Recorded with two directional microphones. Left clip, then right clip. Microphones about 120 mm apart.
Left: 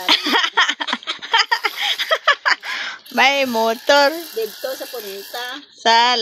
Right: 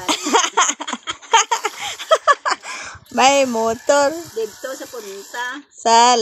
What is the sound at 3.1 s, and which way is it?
Speech, 15° right (ahead or behind).